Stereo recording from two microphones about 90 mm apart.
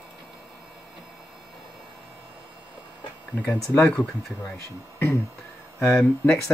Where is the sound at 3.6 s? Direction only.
30° left (ahead or behind).